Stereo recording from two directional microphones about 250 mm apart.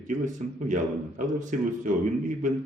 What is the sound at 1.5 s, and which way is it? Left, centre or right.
Speech, right.